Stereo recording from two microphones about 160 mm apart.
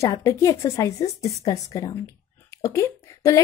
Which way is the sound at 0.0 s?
20° left (ahead or behind).